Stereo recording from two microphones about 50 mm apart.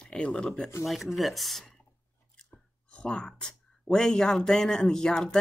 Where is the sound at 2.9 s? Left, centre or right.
Left.